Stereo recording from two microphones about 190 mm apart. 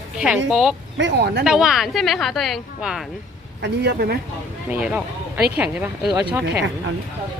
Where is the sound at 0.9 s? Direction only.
70° right (ahead or behind).